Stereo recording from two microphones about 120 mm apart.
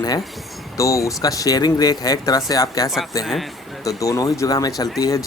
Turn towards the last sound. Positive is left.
turn(degrees=30)  # may be behind; listen again after turning